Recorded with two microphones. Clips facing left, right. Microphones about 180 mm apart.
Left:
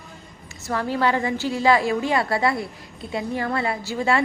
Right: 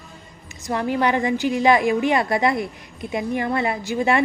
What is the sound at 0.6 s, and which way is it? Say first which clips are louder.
A woman's voice: right 1 dB; 15° right (ahead or behind).